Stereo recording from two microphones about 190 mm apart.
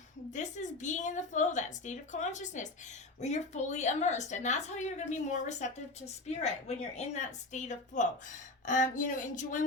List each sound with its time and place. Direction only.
0.3 s a woman's voice: 40° left (ahead or behind)